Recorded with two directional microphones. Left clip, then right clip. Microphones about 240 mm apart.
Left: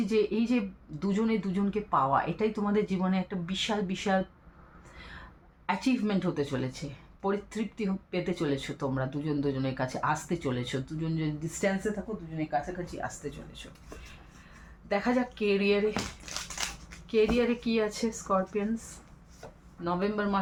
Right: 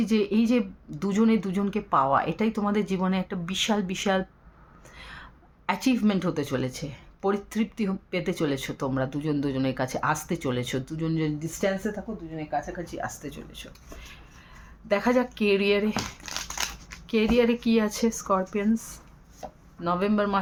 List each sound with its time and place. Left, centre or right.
0.1 s speech: right
5.6 s speech: right
14.8 s speech: right
16.2 s a sound: right
17.1 s speech: right
19.8 s speech: right